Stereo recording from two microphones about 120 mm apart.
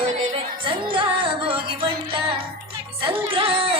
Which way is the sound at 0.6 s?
45° right (ahead or behind).